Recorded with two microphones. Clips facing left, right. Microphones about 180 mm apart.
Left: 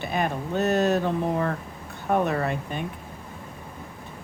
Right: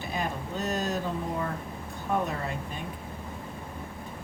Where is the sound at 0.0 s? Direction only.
65° left (ahead or behind).